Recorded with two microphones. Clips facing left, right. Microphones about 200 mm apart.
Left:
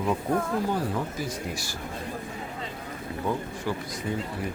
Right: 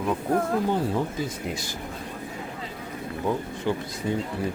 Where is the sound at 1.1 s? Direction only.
20° right (ahead or behind).